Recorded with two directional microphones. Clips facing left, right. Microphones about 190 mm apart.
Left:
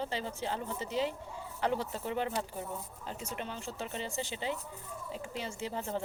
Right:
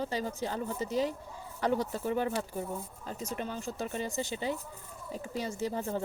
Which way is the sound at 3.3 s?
45° right (ahead or behind).